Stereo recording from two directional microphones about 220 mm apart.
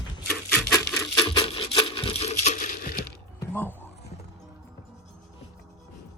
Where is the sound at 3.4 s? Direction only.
10° left (ahead or behind).